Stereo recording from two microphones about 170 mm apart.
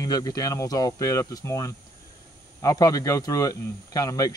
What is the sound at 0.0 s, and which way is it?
Speech, 20° left (ahead or behind).